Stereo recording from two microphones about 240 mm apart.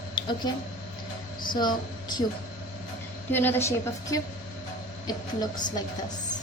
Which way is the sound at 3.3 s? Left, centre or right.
Centre.